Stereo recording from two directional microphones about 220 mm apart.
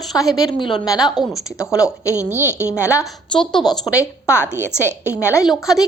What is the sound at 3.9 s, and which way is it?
A woman's voice, 10° left (ahead or behind).